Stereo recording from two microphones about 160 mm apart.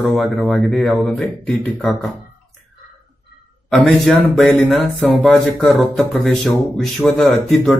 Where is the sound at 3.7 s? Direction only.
Centre (ahead or behind).